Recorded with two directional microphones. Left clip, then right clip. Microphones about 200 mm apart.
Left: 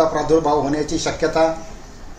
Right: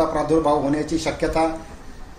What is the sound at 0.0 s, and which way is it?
A man's voice, 5° left (ahead or behind).